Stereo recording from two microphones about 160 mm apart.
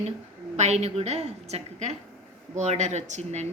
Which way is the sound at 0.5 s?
45° right (ahead or behind).